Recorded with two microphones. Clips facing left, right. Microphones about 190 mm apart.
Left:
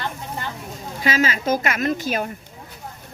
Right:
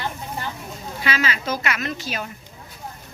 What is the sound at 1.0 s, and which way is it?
A woman's voice, 45° left (ahead or behind).